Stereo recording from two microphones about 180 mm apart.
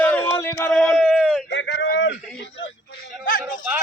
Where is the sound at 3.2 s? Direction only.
50° left (ahead or behind).